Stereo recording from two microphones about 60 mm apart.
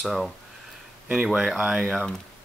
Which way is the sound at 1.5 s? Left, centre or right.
Centre.